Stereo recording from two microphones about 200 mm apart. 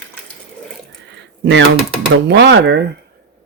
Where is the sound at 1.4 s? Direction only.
65° right (ahead or behind).